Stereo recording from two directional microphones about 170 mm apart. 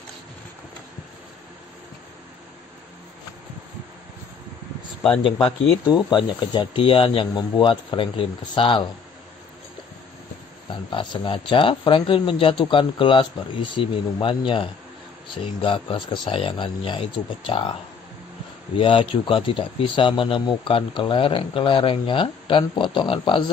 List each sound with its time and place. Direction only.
5.9 s speech: 25° left (ahead or behind)
10.7 s speech: 30° left (ahead or behind)
18.8 s speech: 30° left (ahead or behind)